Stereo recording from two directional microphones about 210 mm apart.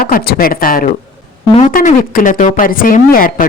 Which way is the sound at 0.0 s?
45° left (ahead or behind).